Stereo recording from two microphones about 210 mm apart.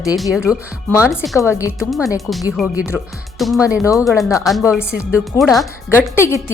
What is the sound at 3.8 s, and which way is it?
Speech, 15° left (ahead or behind).